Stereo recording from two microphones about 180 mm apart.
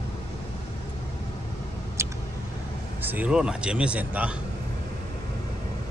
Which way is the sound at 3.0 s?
10° right (ahead or behind).